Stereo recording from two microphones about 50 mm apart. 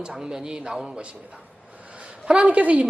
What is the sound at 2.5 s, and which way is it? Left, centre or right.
Speech, right.